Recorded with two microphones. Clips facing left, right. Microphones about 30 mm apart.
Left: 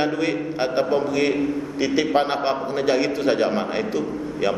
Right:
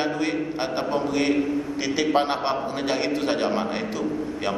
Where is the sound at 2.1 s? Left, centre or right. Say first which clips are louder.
Left 2 dB; centre.